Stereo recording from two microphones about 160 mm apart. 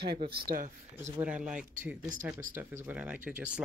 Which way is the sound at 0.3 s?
70° right (ahead or behind).